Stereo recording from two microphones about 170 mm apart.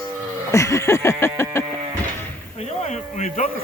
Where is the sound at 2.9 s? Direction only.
45° left (ahead or behind).